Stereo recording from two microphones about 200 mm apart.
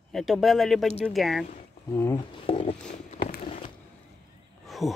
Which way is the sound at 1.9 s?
10° left (ahead or behind).